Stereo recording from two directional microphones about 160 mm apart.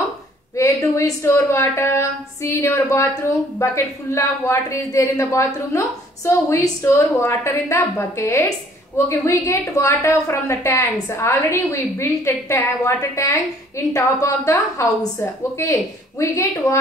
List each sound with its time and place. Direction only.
0.6 s a woman's voice: 20° left (ahead or behind)